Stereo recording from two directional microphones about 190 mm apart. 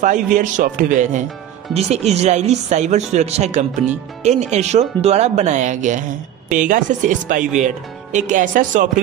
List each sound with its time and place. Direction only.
0.0 s speech: 40° right (ahead or behind)